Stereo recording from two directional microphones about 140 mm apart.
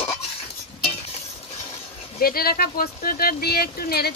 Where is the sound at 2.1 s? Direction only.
90° left.